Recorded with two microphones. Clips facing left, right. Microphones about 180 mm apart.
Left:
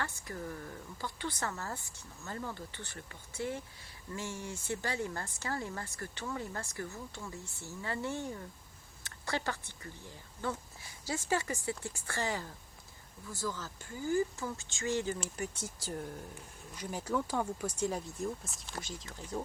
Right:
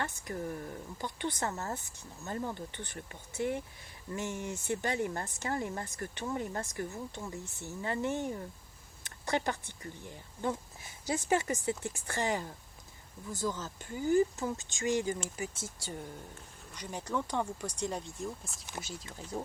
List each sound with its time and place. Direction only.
0.0 s speech: 20° right (ahead or behind)
15.2 s speech: centre (ahead or behind)